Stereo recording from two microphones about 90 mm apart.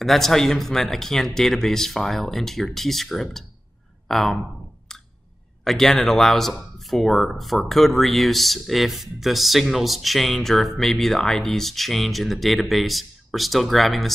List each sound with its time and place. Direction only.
0.0 s speech: 5° left (ahead or behind)
5.6 s speech: 5° left (ahead or behind)